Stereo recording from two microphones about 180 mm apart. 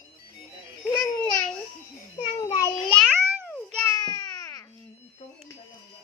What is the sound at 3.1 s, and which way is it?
Babbling, 10° right (ahead or behind).